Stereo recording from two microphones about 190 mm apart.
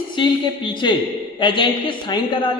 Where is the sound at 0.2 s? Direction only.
25° left (ahead or behind).